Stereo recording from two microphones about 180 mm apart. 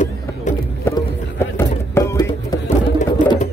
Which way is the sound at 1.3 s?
15° left (ahead or behind).